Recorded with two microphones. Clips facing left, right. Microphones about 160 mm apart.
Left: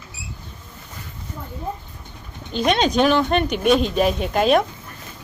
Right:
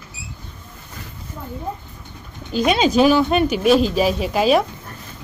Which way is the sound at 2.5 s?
5° right (ahead or behind).